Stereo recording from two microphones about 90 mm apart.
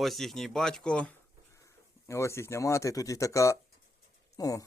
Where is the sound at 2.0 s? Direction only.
30° left (ahead or behind).